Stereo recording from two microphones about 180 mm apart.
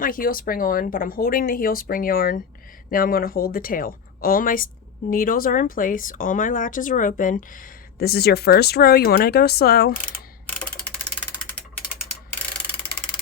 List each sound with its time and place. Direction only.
0.0 s speech: 50° left (ahead or behind)